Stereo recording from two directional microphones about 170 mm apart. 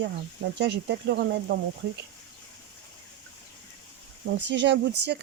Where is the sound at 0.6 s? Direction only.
90° right.